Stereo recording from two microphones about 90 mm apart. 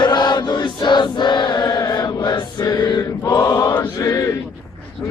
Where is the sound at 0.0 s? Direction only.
55° left (ahead or behind).